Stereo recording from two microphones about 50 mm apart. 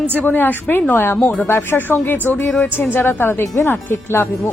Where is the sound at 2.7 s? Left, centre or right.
Left.